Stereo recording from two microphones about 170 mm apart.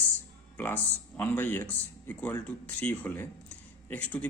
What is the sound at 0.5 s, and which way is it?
A man's voice, 10° left (ahead or behind).